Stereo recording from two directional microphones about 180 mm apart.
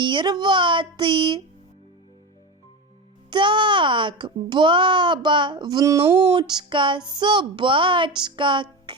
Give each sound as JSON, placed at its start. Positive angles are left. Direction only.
{"t": 0.0, "sound": "a child's voice", "side_deg": -25}
{"t": 3.2, "sound": "a child's voice", "side_deg": -25}
{"t": 8.9, "sound": "music", "side_deg": -25}